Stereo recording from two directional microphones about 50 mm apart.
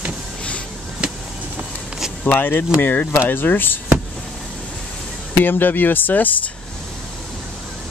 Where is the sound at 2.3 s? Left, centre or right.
Left.